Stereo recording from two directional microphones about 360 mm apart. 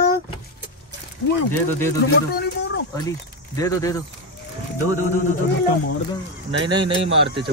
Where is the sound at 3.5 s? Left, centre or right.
Centre.